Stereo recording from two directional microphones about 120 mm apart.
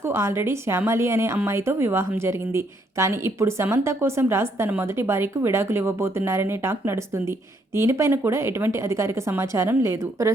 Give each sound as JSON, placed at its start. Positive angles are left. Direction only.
{"t": 0.1, "sound": "a woman's voice", "side_deg": -20}